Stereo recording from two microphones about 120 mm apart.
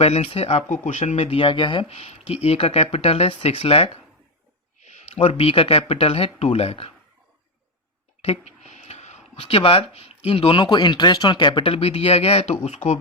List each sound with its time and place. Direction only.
0.0 s speech: 55° left (ahead or behind)
1.9 s speech: 60° left (ahead or behind)
4.8 s speech: 75° left (ahead or behind); by 6.9 s 55° left (ahead or behind)
8.2 s speech: 60° left (ahead or behind)